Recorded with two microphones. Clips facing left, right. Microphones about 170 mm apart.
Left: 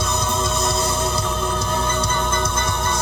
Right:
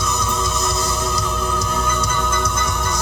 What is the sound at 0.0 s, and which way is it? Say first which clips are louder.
Music: even; 30° left (ahead or behind).